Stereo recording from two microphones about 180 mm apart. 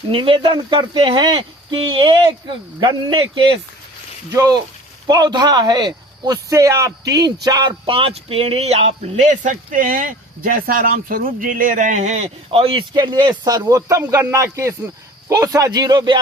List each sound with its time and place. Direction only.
0.1 s a man's voice: 30° right (ahead or behind)